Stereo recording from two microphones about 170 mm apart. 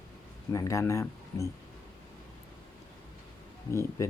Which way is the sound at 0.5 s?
20° left (ahead or behind).